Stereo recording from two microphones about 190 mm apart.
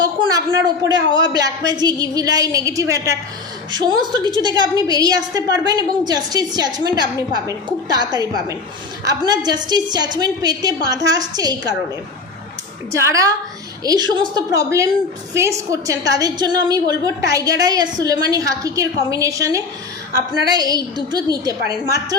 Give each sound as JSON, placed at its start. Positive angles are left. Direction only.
{"t": 0.0, "sound": "a sound", "side_deg": -20}
{"t": 1.3, "sound": "a woman's voice", "side_deg": -20}
{"t": 12.9, "sound": "a woman's voice", "side_deg": -15}